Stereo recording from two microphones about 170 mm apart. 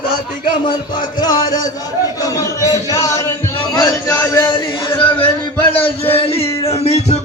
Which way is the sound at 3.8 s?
20° left (ahead or behind).